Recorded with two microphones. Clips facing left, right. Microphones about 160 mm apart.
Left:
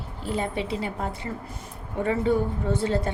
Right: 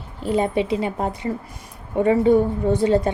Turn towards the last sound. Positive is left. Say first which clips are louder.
# right 7 dB
turn(degrees=-15)  # may be behind; listen again after turning